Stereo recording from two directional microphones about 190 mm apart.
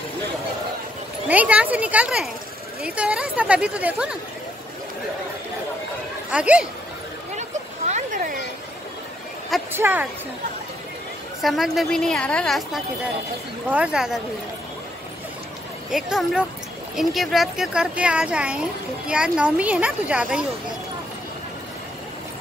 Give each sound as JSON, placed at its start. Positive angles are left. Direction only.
{"t": 1.3, "sound": "speech", "side_deg": -5}
{"t": 6.3, "sound": "speech", "side_deg": -5}
{"t": 7.3, "sound": "a sound", "side_deg": -40}
{"t": 9.7, "sound": "speech", "side_deg": -10}
{"t": 11.4, "sound": "speech", "side_deg": 0}
{"t": 15.9, "sound": "speech", "side_deg": 0}